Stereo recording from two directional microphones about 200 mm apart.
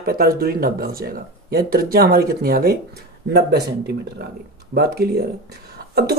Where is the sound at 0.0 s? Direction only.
50° right (ahead or behind).